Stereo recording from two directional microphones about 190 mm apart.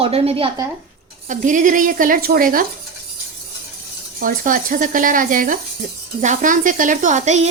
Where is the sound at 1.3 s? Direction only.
40° right (ahead or behind).